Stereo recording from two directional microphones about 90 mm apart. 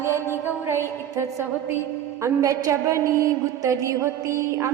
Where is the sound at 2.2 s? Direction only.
35° right (ahead or behind).